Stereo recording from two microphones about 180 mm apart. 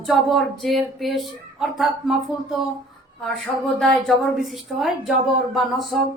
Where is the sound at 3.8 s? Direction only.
Centre (ahead or behind).